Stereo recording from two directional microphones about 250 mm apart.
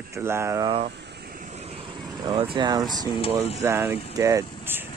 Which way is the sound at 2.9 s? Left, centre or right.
Centre.